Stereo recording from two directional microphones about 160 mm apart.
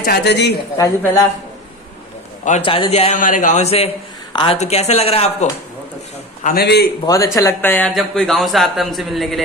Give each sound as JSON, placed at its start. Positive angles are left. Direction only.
{"t": 0.0, "sound": "a woman's voice", "side_deg": 80}
{"t": 0.7, "sound": "speech", "side_deg": 20}
{"t": 2.6, "sound": "speech", "side_deg": 35}
{"t": 3.2, "sound": "a man's voice", "side_deg": 55}
{"t": 4.6, "sound": "speech", "side_deg": 45}
{"t": 6.4, "sound": "a man's voice", "side_deg": 80}
{"t": 7.3, "sound": "speech", "side_deg": 15}
{"t": 7.9, "sound": "a man's voice", "side_deg": 0}